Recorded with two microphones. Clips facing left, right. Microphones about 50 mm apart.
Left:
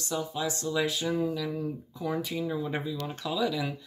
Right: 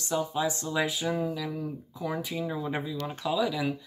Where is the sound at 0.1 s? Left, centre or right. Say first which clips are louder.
Right 3 dB; centre.